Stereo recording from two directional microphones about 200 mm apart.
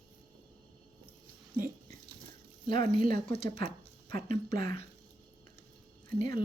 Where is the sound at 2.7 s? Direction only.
25° left (ahead or behind).